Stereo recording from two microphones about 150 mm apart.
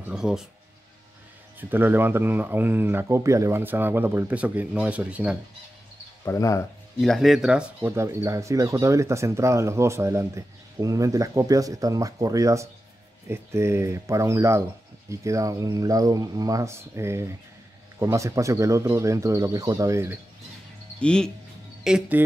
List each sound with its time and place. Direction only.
0.0 s speech: 5° right (ahead or behind)
1.6 s speech: 15° right (ahead or behind)
6.2 s speech: 20° left (ahead or behind)
7.0 s speech: centre (ahead or behind)
7.8 s speech: 20° right (ahead or behind)
21.0 s speech: 5° left (ahead or behind)
21.8 s speech: 5° right (ahead or behind)